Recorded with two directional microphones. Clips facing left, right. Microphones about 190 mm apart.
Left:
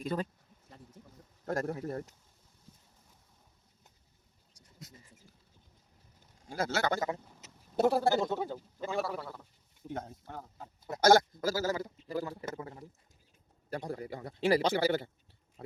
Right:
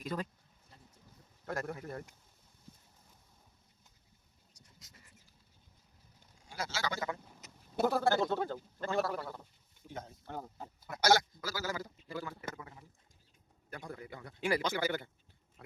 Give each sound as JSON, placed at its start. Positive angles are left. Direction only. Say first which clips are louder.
{"t": 0.0, "sound": "speech", "louder": "left 4 dB", "side_deg": 30}
{"t": 1.5, "sound": "a man's voice", "louder": "left 5 dB", "side_deg": 40}
{"t": 6.4, "sound": "speech", "louder": "left 7 dB", "side_deg": 55}
{"t": 7.3, "sound": "a sound", "louder": "even", "side_deg": 0}
{"t": 8.1, "sound": "speech", "louder": "left 1 dB", "side_deg": 15}
{"t": 9.9, "sound": "a man's voice", "louder": "left 3 dB", "side_deg": 55}